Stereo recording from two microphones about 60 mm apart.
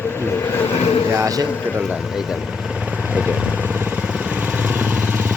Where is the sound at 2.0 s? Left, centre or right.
Centre; by 5.3 s right.